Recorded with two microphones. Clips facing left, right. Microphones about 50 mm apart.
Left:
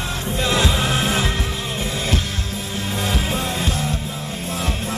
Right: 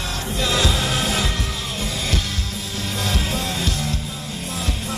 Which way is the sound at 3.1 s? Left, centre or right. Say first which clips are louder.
Left 1 dB; left.